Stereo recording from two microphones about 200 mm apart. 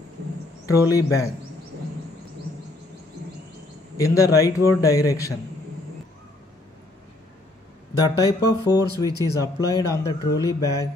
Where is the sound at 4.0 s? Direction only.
15° left (ahead or behind).